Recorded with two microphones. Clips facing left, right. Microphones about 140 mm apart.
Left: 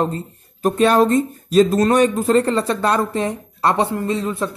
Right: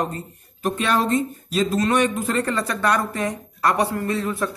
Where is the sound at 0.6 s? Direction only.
40° left (ahead or behind).